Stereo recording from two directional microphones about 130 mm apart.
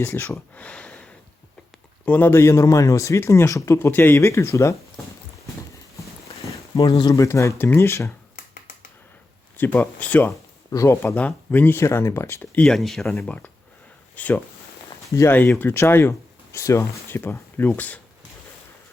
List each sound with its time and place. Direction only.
0.0 s a man's voice: 20° left (ahead or behind)
7.1 s a man's voice: 25° left (ahead or behind)
9.6 s speech: 15° left (ahead or behind)
10.7 s a man's voice: 25° left (ahead or behind)